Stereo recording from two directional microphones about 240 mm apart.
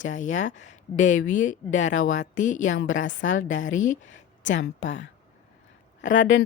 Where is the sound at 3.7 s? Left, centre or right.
Left.